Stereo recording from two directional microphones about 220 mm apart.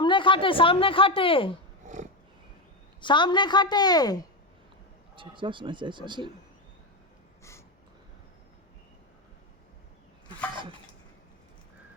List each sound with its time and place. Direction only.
0.0 s speech: 20° left (ahead or behind)
1.8 s a sound: 35° right (ahead or behind)
3.0 s speech: 20° left (ahead or behind)
5.1 s a man's voice: 20° right (ahead or behind)